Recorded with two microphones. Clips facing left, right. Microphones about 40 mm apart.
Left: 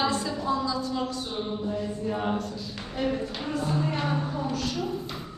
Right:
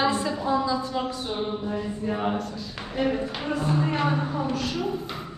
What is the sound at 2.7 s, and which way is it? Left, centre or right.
A woman's voice, centre.